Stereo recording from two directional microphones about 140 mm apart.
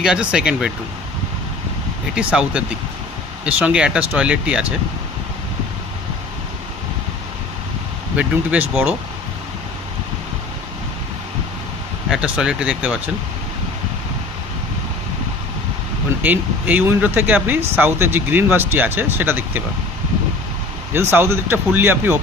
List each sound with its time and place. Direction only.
0.0 s speech: 5° right (ahead or behind)
2.1 s speech: 5° right (ahead or behind)
8.1 s speech: 10° right (ahead or behind)
12.0 s speech: 5° right (ahead or behind)
16.2 s speech: 10° right (ahead or behind)
20.9 s speech: 15° right (ahead or behind)